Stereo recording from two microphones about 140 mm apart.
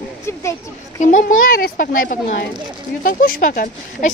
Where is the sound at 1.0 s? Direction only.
60° left (ahead or behind).